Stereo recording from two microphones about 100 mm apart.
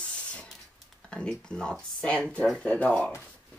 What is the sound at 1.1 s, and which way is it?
Speech, 10° left (ahead or behind).